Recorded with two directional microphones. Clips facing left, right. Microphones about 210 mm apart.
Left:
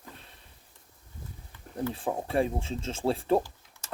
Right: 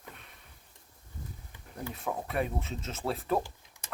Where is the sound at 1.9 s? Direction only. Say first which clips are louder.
Left 3 dB; 30° left (ahead or behind).